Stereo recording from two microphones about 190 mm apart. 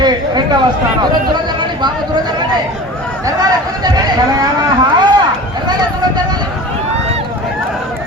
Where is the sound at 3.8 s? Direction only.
20° right (ahead or behind).